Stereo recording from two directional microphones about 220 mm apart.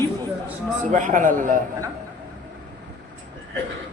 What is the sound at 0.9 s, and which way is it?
Speech, 35° right (ahead or behind).